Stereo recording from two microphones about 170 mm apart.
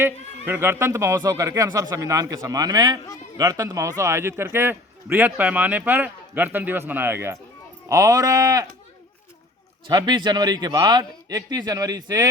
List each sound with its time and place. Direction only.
0.0 s a man's voice: 10° right (ahead or behind)
9.9 s a man's voice: 25° right (ahead or behind)